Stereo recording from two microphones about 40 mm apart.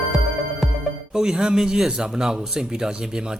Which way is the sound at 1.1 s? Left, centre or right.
Centre.